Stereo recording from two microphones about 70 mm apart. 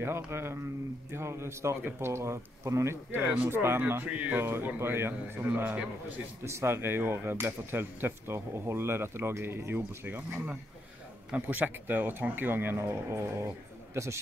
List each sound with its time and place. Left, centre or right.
0.0 s a man's voice: right